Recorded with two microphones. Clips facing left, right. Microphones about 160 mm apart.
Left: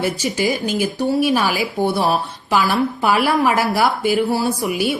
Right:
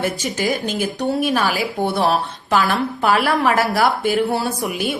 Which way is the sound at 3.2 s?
5° left (ahead or behind).